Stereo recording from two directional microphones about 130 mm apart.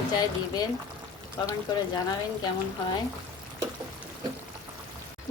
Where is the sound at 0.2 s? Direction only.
30° left (ahead or behind).